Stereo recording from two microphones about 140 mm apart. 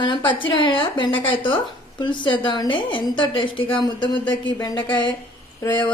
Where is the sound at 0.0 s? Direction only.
35° left (ahead or behind).